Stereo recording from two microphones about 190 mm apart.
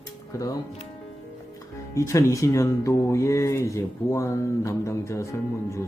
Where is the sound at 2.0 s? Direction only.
15° left (ahead or behind).